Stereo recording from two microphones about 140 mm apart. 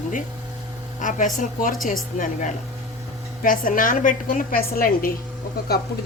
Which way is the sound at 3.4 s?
75° left (ahead or behind).